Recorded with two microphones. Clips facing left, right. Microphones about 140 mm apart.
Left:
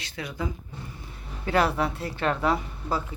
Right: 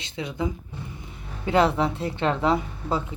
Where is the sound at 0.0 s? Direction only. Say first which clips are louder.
Right 4 dB; 20° right (ahead or behind).